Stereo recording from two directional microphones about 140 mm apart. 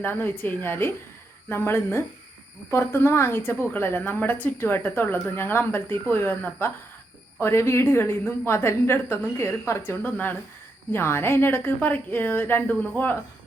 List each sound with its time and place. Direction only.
0.0 s a woman's voice: 15° left (ahead or behind)